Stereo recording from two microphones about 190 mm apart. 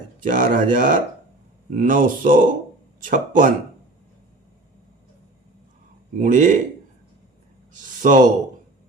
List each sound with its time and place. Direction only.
0.2 s speech: 45° right (ahead or behind)
6.1 s speech: 40° right (ahead or behind)
7.7 s speech: 45° right (ahead or behind)